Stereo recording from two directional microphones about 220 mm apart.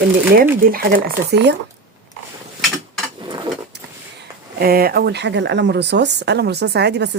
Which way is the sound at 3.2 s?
20° right (ahead or behind).